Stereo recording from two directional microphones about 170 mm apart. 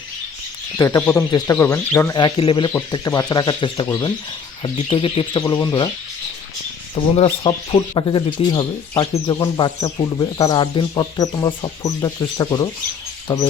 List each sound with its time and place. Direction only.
0.8 s speech: 15° left (ahead or behind)
2.1 s speech: 30° left (ahead or behind)
7.0 s speech: 35° left (ahead or behind)